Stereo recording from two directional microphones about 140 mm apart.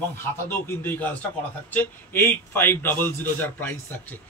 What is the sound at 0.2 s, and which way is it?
Speech, 15° left (ahead or behind).